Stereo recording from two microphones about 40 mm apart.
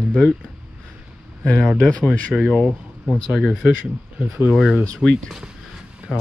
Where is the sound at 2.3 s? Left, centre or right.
Centre.